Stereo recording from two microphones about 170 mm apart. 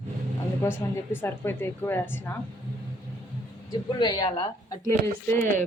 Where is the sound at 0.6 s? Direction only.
15° left (ahead or behind).